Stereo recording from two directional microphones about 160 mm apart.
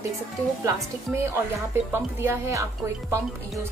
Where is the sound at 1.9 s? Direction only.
15° right (ahead or behind).